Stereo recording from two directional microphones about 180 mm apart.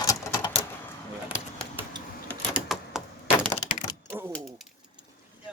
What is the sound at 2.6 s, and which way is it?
Typewriter, 5° right (ahead or behind).